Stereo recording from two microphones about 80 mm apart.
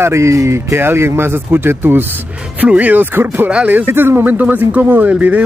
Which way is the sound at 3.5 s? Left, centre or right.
Centre.